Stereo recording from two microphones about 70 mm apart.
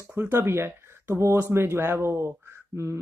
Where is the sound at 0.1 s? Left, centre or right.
Right.